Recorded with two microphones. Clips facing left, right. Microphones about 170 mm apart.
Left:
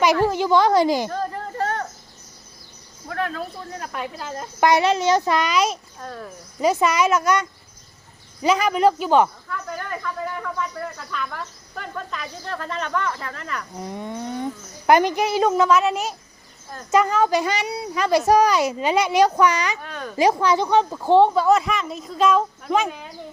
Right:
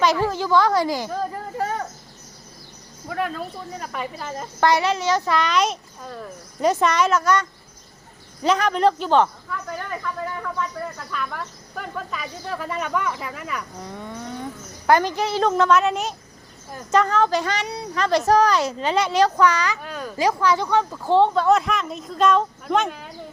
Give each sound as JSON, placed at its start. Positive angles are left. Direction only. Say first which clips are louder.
{"t": 0.0, "sound": "a child's voice", "louder": "left 2 dB", "side_deg": 15}
{"t": 1.1, "sound": "a sound", "louder": "even", "side_deg": -5}
{"t": 3.1, "sound": "speech", "louder": "even", "side_deg": -5}
{"t": 4.6, "sound": "a child's voice", "louder": "left 2 dB", "side_deg": 20}
{"t": 5.5, "sound": "speech", "louder": "even", "side_deg": 5}
{"t": 13.8, "sound": "a child's voice", "louder": "left 4 dB", "side_deg": 20}
{"t": 19.8, "sound": "speech", "louder": "right 1 dB", "side_deg": -5}
{"t": 20.1, "sound": "speech", "louder": "left 2 dB", "side_deg": 20}